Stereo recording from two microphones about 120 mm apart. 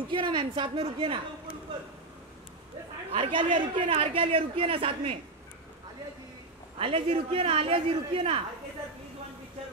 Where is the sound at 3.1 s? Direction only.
45° right (ahead or behind).